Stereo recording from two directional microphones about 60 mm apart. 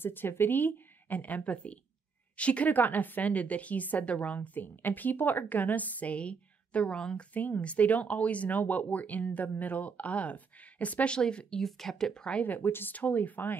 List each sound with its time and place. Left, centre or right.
0.0 s a woman's voice: left; by 7.2 s centre
7.3 s a woman's voice: left
11.1 s speech: centre
12.4 s a woman's voice: left